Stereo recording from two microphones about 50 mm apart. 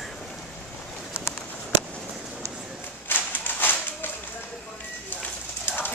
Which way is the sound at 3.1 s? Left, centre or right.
Left.